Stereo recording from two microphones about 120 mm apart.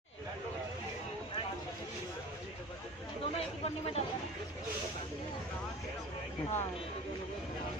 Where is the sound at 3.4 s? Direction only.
55° left (ahead or behind).